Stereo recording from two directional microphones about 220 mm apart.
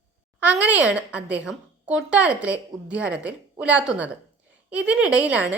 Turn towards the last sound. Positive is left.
turn(degrees=-5)  # may be behind; listen again after turning